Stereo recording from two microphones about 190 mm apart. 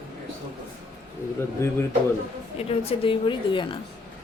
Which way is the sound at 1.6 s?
15° left (ahead or behind).